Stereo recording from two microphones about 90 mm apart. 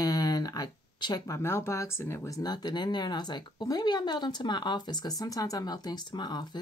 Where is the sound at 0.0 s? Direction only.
45° left (ahead or behind); by 2.3 s 25° left (ahead or behind).